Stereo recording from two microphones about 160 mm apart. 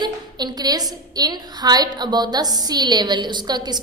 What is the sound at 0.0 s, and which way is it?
A woman's voice, 25° right (ahead or behind).